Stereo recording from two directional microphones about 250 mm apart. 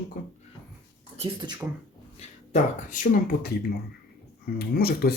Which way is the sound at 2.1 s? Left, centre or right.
Left.